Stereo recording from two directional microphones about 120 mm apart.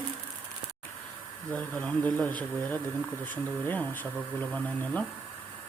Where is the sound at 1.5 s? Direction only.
10° left (ahead or behind).